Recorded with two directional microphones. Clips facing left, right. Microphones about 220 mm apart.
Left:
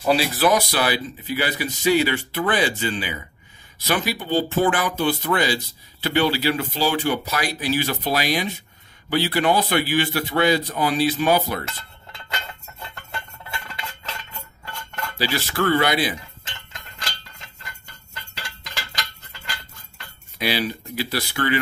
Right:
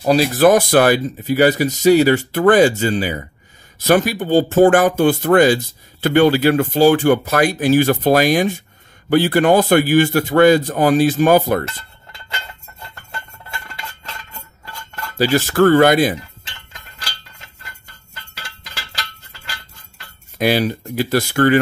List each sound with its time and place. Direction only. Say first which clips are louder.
0.0 s speech: right 7 dB; 45° right (ahead or behind)
15.1 s speech: right 10 dB; 45° right (ahead or behind)
20.3 s speech: right 8 dB; 45° right (ahead or behind)